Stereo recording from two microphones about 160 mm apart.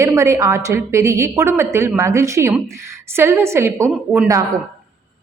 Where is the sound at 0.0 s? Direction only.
20° right (ahead or behind).